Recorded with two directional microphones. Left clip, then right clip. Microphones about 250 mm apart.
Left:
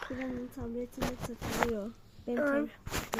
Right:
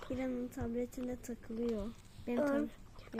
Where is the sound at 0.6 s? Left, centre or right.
Centre.